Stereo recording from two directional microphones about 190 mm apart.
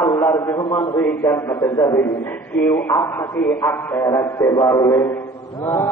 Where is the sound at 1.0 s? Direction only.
10° left (ahead or behind).